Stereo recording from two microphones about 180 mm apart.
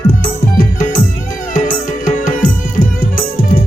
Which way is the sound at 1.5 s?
45° left (ahead or behind).